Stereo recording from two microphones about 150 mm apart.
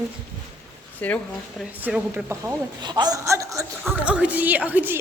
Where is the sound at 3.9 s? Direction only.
10° right (ahead or behind).